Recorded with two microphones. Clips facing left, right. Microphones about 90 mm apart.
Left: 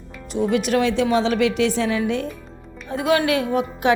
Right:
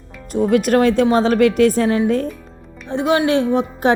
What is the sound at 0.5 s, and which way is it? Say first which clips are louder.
A woman's voice: right 6 dB; 45° right (ahead or behind).